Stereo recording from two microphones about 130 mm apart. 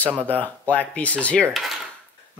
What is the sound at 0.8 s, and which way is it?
Speech, 10° left (ahead or behind).